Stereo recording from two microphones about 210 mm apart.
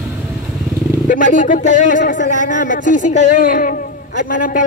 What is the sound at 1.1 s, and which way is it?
A woman's voice, 40° left (ahead or behind).